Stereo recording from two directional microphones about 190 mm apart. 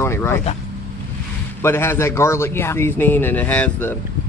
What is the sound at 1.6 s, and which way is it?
A man's voice, 15° left (ahead or behind).